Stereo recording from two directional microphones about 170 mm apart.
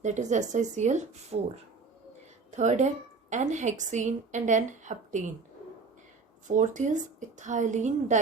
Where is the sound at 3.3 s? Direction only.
45° right (ahead or behind).